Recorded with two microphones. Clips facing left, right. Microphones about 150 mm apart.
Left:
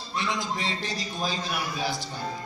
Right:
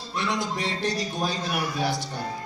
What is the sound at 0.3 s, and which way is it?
Speech, 65° right (ahead or behind).